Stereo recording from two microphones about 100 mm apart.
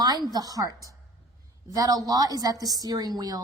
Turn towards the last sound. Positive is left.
turn(degrees=-40)  # may be behind; listen again after turning